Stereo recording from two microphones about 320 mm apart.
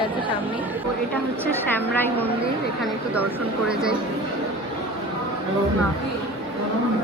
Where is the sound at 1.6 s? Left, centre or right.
Centre.